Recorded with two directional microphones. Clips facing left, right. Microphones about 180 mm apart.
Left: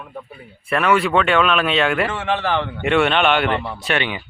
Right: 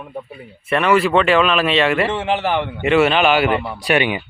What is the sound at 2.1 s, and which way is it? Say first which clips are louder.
Speech: right 2 dB; 25° right (ahead or behind).